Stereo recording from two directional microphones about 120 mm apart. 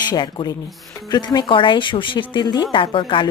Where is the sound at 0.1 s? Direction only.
35° left (ahead or behind).